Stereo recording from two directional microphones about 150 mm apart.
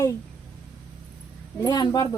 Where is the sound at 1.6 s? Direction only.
25° left (ahead or behind).